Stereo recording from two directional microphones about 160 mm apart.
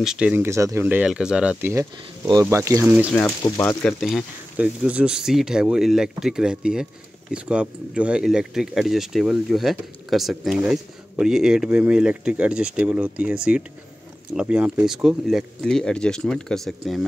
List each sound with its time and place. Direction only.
0.0 s speech: 5° right (ahead or behind)
3.2 s speech: 15° left (ahead or behind)
3.8 s speech: centre (ahead or behind)